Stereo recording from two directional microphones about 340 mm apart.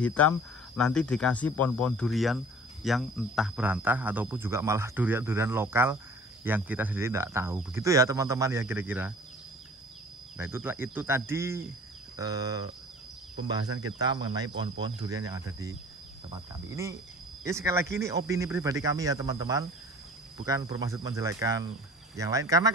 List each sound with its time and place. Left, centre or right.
0.0 s speech: centre
10.3 s speech: centre
13.8 s speech: centre